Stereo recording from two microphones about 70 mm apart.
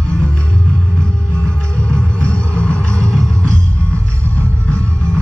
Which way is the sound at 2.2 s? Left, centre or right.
Centre.